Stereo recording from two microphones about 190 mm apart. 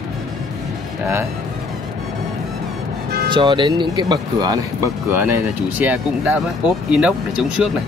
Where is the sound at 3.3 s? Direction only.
25° right (ahead or behind).